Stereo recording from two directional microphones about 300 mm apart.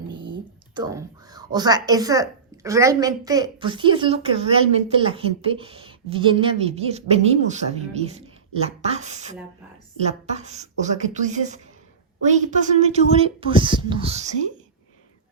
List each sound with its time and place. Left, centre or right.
0.1 s speech: centre